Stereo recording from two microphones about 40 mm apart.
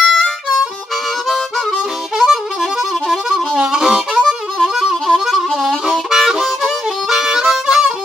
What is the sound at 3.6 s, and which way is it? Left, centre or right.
Harmonica, centre.